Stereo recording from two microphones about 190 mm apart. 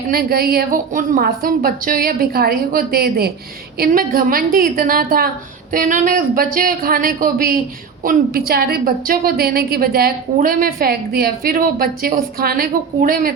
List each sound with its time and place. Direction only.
0.1 s a woman's voice: 50° right (ahead or behind)